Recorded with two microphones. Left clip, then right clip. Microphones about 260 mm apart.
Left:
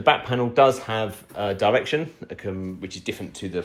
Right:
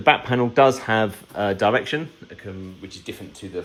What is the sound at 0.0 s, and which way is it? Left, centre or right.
Speech, centre.